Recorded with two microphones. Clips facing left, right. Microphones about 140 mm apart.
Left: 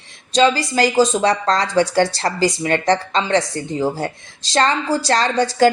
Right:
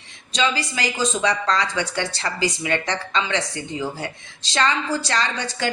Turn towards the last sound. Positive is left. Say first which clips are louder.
# left 11 dB
turn(degrees=40)  # may be behind; listen again after turning